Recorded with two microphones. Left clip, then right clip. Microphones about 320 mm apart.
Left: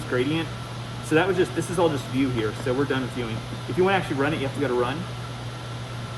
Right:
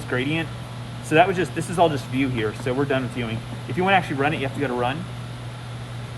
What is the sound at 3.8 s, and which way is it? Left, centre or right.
Speech, right.